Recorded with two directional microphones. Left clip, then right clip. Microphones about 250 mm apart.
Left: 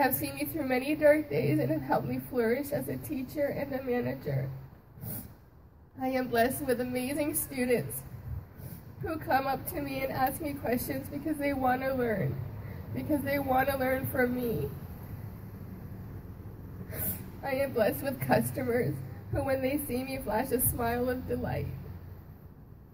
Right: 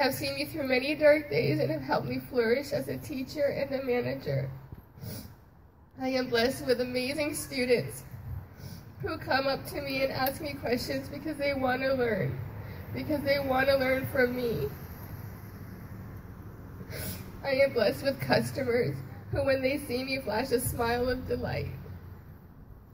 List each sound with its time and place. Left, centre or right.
0.0 s a woman's voice: left
5.9 s a woman's voice: left
9.0 s a woman's voice: left
16.9 s a woman's voice: left